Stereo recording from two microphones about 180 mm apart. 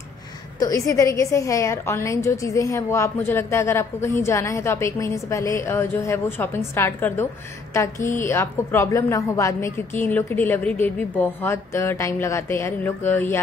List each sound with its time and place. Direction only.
0.6 s a woman's voice: 20° left (ahead or behind)